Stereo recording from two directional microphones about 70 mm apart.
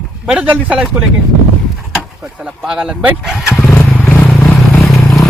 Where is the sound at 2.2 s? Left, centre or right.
Centre.